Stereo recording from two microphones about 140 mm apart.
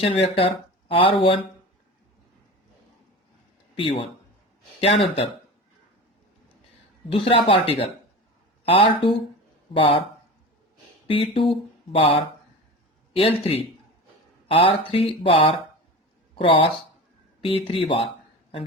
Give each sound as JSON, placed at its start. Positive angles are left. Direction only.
{"t": 0.0, "sound": "speech", "side_deg": 40}
{"t": 3.8, "sound": "speech", "side_deg": 40}
{"t": 7.1, "sound": "speech", "side_deg": 40}
{"t": 11.1, "sound": "speech", "side_deg": 40}
{"t": 13.4, "sound": "speech", "side_deg": 45}